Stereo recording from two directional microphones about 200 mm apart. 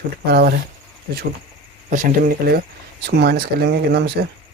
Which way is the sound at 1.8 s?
40° right (ahead or behind).